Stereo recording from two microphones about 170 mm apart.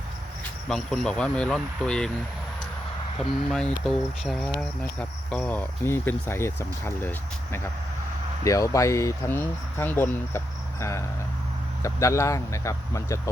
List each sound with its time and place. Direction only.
0.7 s speech: 5° left (ahead or behind)
3.5 s speech: 5° left (ahead or behind)